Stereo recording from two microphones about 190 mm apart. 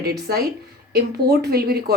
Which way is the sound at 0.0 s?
55° right (ahead or behind).